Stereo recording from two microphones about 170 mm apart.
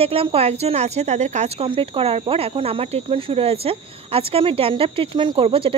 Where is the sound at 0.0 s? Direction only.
35° right (ahead or behind).